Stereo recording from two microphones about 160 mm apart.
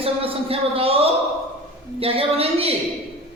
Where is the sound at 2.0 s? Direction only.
35° right (ahead or behind).